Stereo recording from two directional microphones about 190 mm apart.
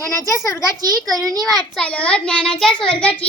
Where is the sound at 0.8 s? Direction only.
20° right (ahead or behind).